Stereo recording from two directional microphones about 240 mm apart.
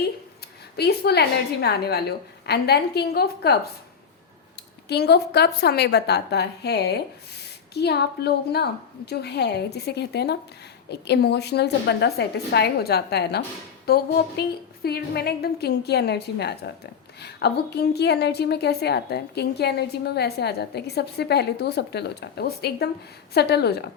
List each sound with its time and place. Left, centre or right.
0.8 s a woman's voice: left
4.9 s a woman's voice: left
13.8 s a sound: left
14.8 s a woman's voice: left